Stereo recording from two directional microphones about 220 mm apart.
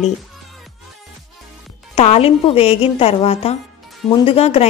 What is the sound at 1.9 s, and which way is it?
Speech, 25° left (ahead or behind).